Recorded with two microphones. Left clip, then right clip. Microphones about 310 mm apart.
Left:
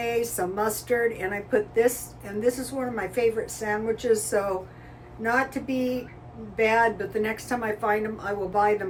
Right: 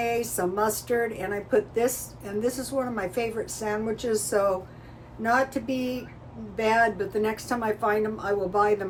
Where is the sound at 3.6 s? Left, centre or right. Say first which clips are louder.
Left 3 dB; centre.